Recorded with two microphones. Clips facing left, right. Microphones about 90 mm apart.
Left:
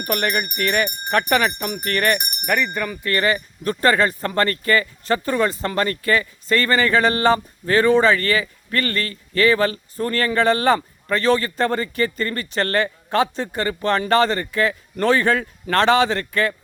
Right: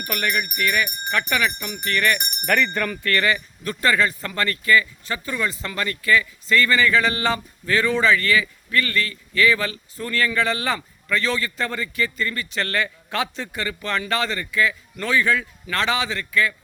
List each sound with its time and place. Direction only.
0.0 s a man's voice: 40° left (ahead or behind)
2.1 s speech: 10° left (ahead or behind)
3.0 s a man's voice: 25° left (ahead or behind); by 16.6 s 50° left (ahead or behind)